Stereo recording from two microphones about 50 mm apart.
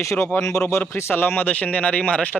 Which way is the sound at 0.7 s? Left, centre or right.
Left.